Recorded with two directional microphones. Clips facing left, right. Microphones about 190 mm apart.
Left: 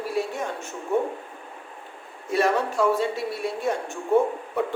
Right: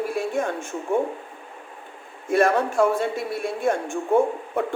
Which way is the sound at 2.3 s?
50° right (ahead or behind).